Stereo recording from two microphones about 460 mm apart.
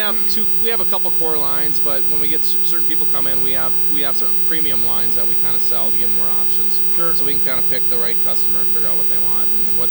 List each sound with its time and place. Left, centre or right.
0.0 s speech: right
7.1 s speech: right